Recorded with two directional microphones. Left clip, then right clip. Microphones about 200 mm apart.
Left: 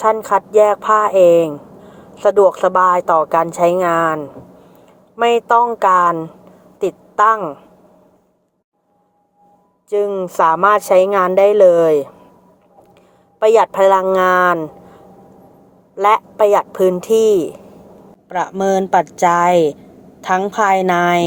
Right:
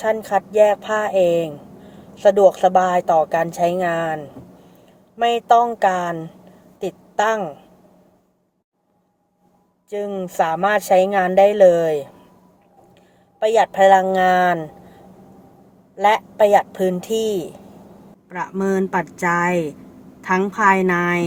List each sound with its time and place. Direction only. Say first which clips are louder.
0.0 s a woman's voice: left 5 dB; 10° left (ahead or behind)
9.9 s speech: left 8 dB; 10° left (ahead or behind)
13.4 s speech: left 3 dB; 15° left (ahead or behind)
16.0 s a woman's voice: left 3 dB; 20° left (ahead or behind)